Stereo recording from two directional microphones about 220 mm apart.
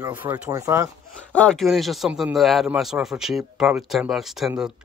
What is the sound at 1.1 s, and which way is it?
A man's voice, 5° left (ahead or behind).